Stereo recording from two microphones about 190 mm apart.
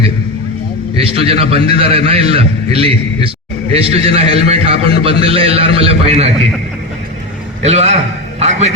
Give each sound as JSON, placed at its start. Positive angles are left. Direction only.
{"t": 0.9, "sound": "a man's voice", "side_deg": -30}
{"t": 7.6, "sound": "a man's voice", "side_deg": -35}